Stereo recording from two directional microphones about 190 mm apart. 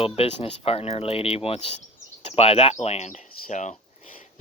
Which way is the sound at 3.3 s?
40° left (ahead or behind).